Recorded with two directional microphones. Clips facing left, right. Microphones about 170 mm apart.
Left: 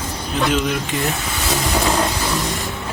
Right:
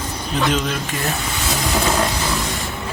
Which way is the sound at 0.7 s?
15° left (ahead or behind).